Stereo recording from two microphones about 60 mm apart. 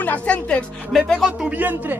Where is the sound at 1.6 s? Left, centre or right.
Right.